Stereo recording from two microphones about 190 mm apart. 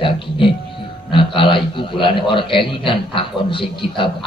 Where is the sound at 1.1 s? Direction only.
25° left (ahead or behind).